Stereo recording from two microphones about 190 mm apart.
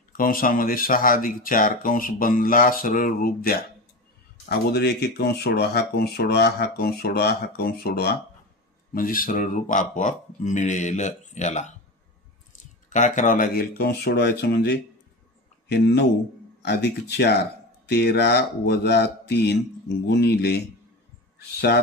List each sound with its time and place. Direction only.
0.2 s speech: 50° left (ahead or behind)
12.9 s speech: 40° left (ahead or behind); by 21.8 s 60° left (ahead or behind)